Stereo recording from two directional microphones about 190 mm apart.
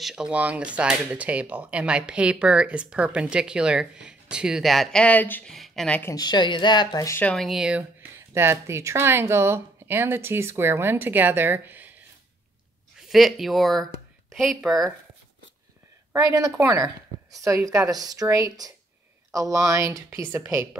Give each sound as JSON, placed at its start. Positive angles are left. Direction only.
{"t": 0.0, "sound": "speech", "side_deg": -5}
{"t": 6.1, "sound": "speech", "side_deg": 20}
{"t": 8.4, "sound": "speech", "side_deg": -15}
{"t": 13.1, "sound": "speech", "side_deg": 0}
{"t": 16.1, "sound": "speech", "side_deg": -15}